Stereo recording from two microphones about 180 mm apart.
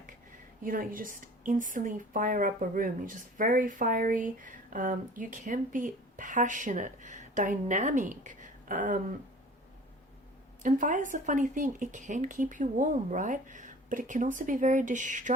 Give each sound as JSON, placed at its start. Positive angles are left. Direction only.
{"t": 0.6, "sound": "speech", "side_deg": -50}
{"t": 10.6, "sound": "speech", "side_deg": -45}